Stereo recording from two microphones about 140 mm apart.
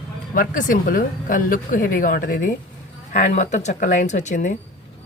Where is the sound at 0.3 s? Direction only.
80° left.